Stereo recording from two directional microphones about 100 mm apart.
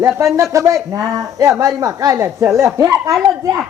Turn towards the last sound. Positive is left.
turn(degrees=-35)  # may be behind; listen again after turning